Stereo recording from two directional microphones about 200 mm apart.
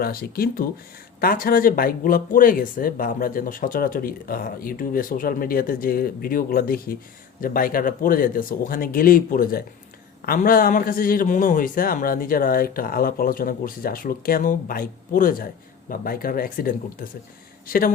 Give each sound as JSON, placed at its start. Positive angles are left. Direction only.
{"t": 0.0, "sound": "speech", "side_deg": 50}